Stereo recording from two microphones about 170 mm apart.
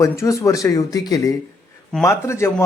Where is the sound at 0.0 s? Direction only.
20° left (ahead or behind).